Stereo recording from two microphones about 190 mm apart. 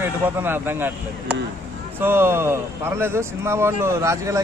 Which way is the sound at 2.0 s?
10° right (ahead or behind).